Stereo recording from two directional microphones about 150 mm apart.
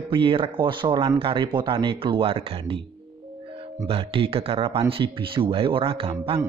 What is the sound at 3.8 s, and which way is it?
Speech, 35° right (ahead or behind).